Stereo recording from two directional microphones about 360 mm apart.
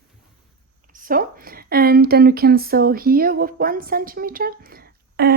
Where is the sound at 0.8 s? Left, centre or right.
Right.